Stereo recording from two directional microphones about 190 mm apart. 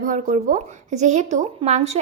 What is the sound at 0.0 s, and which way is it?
Speech, 45° right (ahead or behind).